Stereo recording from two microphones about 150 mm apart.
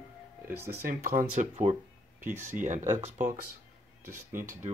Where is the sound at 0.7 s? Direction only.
80° right.